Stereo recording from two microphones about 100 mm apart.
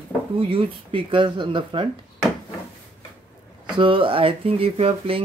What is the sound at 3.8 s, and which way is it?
Speech, 60° right (ahead or behind).